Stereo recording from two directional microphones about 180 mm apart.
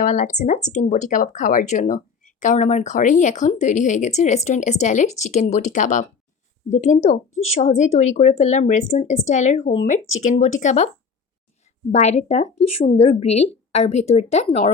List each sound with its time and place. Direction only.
0.0 s speech: 45° left (ahead or behind)
11.9 s speech: 35° left (ahead or behind)